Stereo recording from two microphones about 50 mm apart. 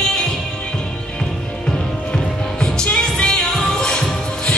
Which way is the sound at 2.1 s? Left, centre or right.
Centre.